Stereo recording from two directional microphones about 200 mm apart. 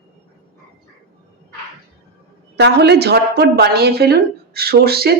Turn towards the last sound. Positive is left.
turn(degrees=-50)  # may be behind; listen again after turning